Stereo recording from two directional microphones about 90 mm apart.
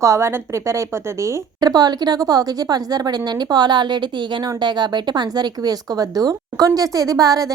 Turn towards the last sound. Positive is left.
turn(degrees=-40)  # may be behind; listen again after turning